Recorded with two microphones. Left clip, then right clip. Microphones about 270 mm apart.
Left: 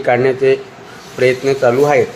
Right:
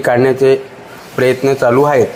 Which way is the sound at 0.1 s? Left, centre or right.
Centre.